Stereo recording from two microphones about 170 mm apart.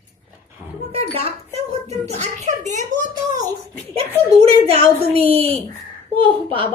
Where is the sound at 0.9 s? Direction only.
35° right (ahead or behind).